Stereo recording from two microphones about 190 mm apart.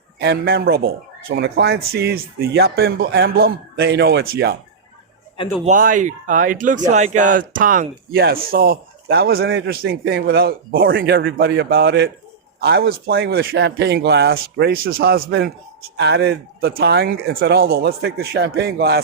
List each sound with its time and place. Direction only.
0.2 s speech: 55° right (ahead or behind)
5.6 s speech: 45° right (ahead or behind)